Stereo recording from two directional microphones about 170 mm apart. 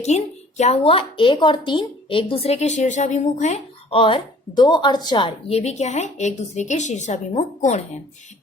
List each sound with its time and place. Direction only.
0.0 s speech: 40° left (ahead or behind)